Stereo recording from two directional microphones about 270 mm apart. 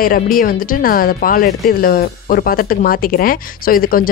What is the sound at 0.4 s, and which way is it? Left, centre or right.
Speech, left.